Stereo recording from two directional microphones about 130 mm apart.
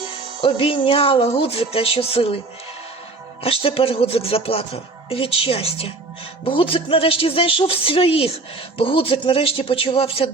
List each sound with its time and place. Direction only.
0.4 s speech: 45° left (ahead or behind)
3.4 s speech: 45° left (ahead or behind)